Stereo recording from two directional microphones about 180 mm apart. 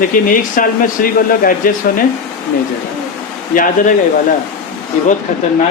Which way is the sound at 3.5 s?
45° left (ahead or behind).